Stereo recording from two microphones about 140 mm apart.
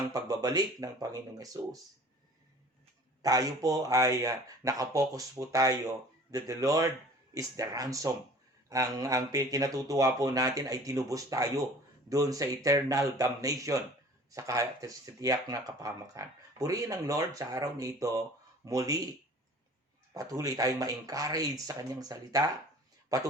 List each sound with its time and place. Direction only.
0.1 s speech: 25° right (ahead or behind)
3.2 s speech: 25° right (ahead or behind)
20.1 s speech: 25° right (ahead or behind)